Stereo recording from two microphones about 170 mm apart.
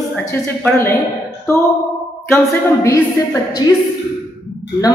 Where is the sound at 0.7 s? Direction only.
15° left (ahead or behind).